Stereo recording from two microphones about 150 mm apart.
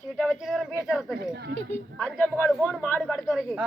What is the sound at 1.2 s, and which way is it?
Speech, 90° right.